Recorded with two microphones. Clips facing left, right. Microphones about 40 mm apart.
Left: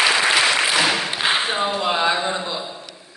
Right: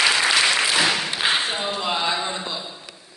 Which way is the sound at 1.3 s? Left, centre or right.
Centre.